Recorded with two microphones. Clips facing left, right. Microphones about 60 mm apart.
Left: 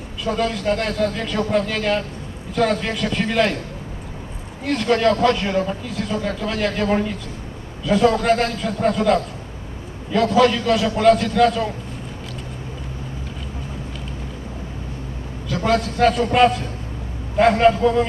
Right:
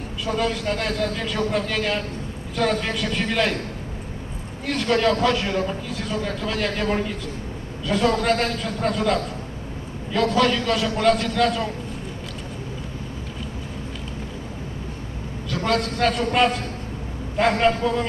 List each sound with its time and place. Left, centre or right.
0.2 s a man's voice: centre
4.6 s a man's voice: centre
15.4 s a man's voice: centre